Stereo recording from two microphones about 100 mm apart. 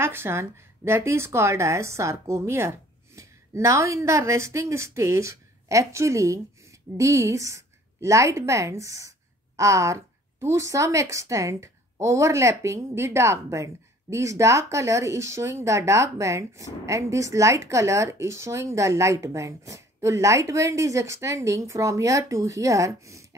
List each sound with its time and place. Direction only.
0.0 s speech: 25° right (ahead or behind)